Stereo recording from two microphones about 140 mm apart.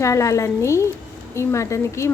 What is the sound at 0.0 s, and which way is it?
Speech, 20° left (ahead or behind).